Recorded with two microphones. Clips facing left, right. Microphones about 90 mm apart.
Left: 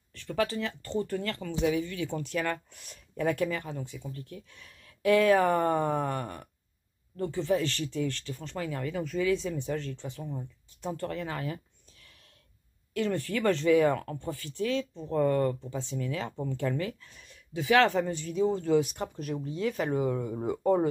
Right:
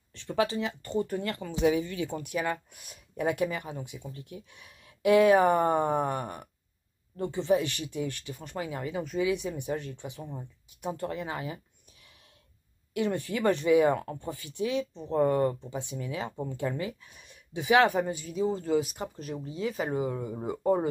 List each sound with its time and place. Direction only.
0.1 s speech: 20° right (ahead or behind)
12.9 s speech: 15° right (ahead or behind)